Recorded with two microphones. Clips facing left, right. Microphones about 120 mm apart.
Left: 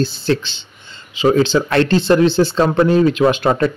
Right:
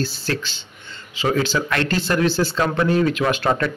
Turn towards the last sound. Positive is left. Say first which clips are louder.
# left 6 dB
turn(degrees=20)  # may be behind; listen again after turning